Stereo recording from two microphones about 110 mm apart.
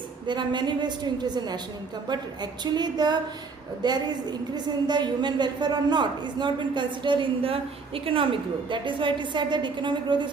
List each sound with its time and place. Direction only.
0.3 s a woman's voice: 40° right (ahead or behind)